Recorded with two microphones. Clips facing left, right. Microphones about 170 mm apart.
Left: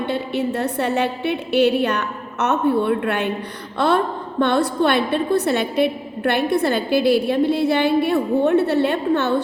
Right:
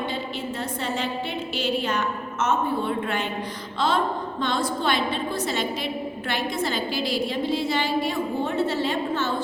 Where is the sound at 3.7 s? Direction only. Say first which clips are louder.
Left 6 dB; 60° left (ahead or behind).